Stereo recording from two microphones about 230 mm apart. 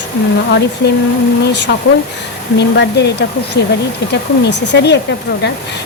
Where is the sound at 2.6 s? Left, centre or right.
Left.